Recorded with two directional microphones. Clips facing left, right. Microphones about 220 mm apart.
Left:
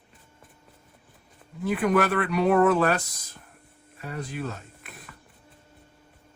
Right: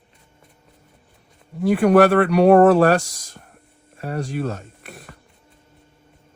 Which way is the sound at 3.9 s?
45° right (ahead or behind).